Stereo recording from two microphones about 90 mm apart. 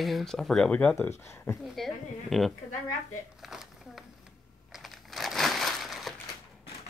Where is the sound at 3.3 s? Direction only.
5° right (ahead or behind).